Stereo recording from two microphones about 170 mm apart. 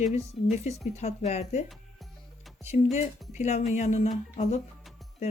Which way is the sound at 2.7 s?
45° left (ahead or behind).